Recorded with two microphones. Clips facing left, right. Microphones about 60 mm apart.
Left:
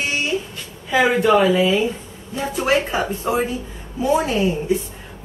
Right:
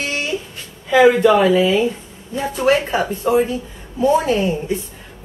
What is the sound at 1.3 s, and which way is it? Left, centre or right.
A woman's voice, centre.